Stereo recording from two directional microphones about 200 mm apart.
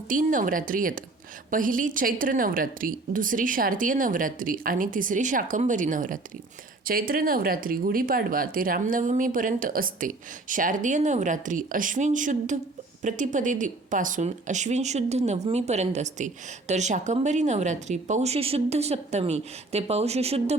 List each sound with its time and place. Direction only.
0.1 s speech: 45° right (ahead or behind)